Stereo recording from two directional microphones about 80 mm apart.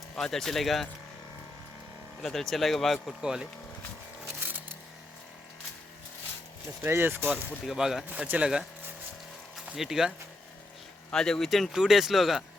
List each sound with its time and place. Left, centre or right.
0.2 s speech: centre
2.2 s speech: centre
3.2 s speech: centre
6.8 s speech: right
7.6 s speech: centre
9.7 s speech: centre
11.1 s speech: centre